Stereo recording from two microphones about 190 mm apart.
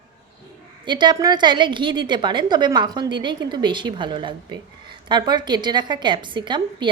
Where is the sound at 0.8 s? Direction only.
25° right (ahead or behind).